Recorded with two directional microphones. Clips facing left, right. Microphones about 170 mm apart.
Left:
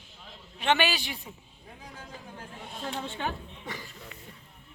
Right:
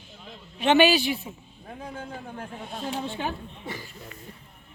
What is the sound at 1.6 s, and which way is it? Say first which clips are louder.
Speech: right 9 dB; 55° right (ahead or behind).